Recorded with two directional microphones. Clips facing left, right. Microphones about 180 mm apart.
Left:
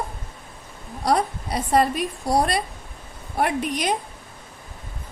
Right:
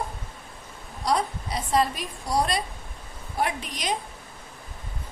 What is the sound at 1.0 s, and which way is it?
A woman's voice, 60° left (ahead or behind).